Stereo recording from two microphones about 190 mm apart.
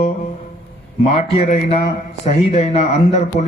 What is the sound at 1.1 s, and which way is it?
A man's voice, 35° left (ahead or behind).